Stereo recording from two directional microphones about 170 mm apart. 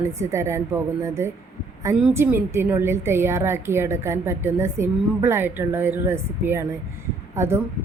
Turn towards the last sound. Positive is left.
turn(degrees=-15)  # may be behind; listen again after turning